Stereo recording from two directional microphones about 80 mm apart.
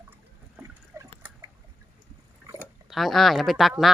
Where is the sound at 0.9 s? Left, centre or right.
Right.